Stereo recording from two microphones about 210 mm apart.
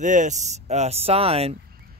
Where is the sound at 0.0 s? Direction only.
35° right (ahead or behind).